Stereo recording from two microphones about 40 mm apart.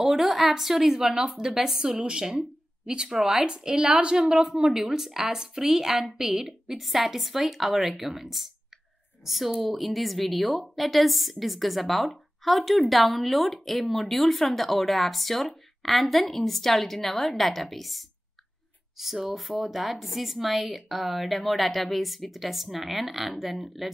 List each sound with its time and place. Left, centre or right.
0.0 s a woman's voice: centre
3.2 s a woman's voice: centre
3.4 s a woman's voice: right
4.5 s a woman's voice: centre